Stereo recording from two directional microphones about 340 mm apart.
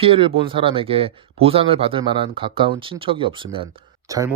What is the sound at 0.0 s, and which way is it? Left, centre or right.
Speech, centre.